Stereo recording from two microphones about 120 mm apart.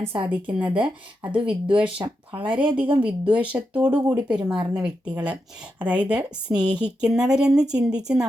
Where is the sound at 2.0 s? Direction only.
30° right (ahead or behind).